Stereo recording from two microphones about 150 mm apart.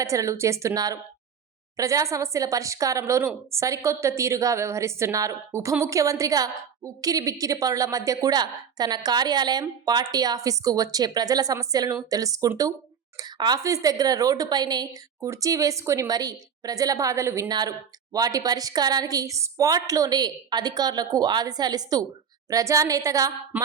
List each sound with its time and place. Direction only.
0.0 s a woman's voice: 20° right (ahead or behind)